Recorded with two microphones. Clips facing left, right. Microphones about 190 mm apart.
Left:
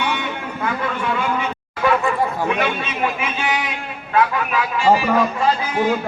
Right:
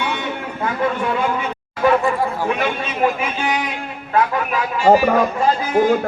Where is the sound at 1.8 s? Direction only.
35° right (ahead or behind).